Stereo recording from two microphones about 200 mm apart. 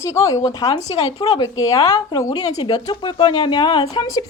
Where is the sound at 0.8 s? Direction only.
25° left (ahead or behind).